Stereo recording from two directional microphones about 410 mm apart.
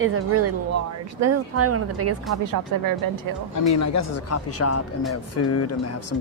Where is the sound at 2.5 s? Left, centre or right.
Right.